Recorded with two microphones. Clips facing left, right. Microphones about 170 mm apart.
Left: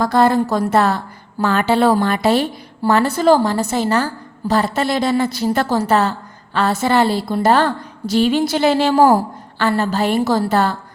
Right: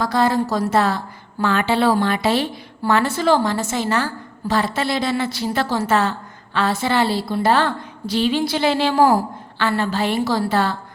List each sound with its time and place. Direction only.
0.0 s a woman's voice: 55° left (ahead or behind)
1.4 s a woman's voice: 40° left (ahead or behind)